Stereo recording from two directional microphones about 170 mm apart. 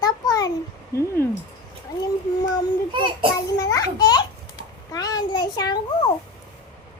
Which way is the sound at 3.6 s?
20° left (ahead or behind).